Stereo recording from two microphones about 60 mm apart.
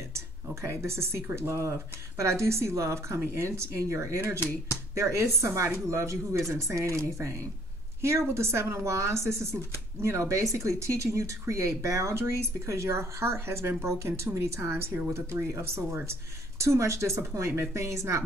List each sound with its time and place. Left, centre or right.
0.6 s speech: right
14.6 s speech: right